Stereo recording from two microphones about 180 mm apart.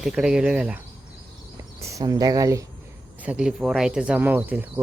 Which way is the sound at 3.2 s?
5° right (ahead or behind).